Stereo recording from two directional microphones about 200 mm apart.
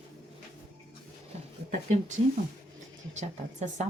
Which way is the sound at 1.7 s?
35° right (ahead or behind).